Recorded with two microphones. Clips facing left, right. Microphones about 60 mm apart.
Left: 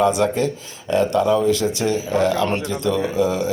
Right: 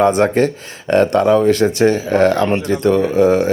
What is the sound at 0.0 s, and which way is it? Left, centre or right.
Speech, right.